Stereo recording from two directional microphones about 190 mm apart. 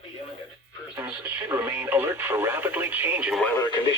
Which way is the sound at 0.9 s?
10° right (ahead or behind).